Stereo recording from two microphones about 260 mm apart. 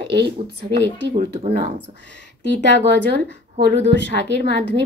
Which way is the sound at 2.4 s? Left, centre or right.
Right.